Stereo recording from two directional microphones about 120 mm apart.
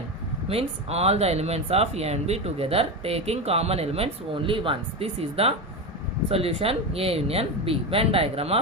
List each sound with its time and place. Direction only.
0.4 s speech: 55° right (ahead or behind)